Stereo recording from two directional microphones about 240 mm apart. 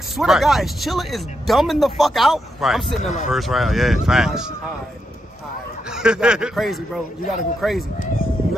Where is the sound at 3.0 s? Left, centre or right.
Left.